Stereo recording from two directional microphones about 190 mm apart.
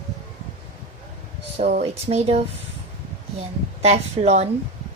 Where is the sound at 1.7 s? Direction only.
35° right (ahead or behind).